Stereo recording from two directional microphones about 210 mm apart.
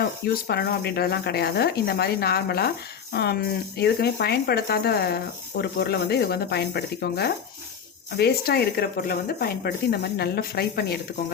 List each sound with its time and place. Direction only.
0.0 s speech: 50° left (ahead or behind)